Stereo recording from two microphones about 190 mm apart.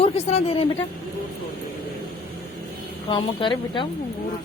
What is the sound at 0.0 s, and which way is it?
Speech, 35° left (ahead or behind).